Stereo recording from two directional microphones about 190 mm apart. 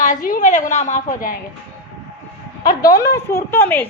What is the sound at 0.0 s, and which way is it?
A woman's voice, 45° left (ahead or behind).